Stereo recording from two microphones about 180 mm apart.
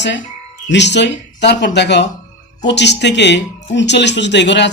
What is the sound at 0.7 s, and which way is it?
Speech, 75° left (ahead or behind).